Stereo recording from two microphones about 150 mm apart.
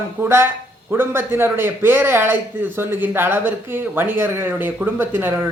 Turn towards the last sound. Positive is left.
turn(degrees=-15)  # may be behind; listen again after turning